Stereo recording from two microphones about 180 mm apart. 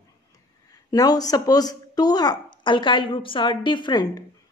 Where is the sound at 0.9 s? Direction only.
20° left (ahead or behind).